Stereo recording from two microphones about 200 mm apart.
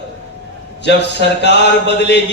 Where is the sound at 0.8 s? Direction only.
60° left (ahead or behind).